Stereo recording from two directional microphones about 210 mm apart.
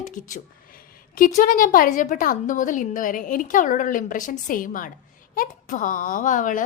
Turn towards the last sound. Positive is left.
turn(degrees=40)  # may be behind; listen again after turning